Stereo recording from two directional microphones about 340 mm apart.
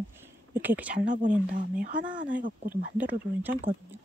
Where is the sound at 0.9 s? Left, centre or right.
Right.